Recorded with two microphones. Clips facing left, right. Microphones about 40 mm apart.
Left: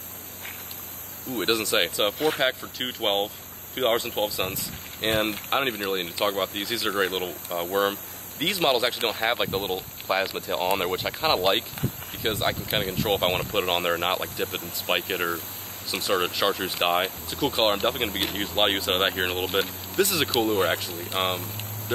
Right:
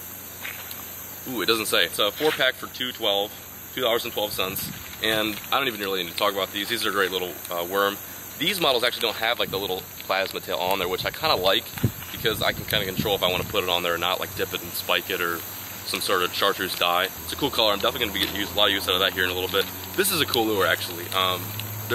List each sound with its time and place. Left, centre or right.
1.4 s speech: right
2.8 s speech: centre
14.9 s speech: centre
17.3 s speech: right